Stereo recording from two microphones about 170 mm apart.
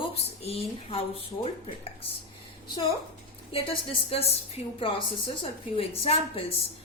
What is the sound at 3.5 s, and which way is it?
A woman's voice, 35° left (ahead or behind).